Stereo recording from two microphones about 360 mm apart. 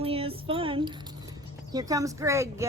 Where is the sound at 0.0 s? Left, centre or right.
Centre.